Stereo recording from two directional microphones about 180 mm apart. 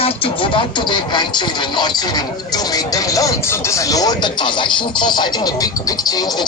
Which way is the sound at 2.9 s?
20° left (ahead or behind).